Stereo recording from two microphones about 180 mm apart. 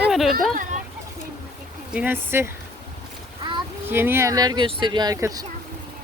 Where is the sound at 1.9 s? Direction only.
10° right (ahead or behind).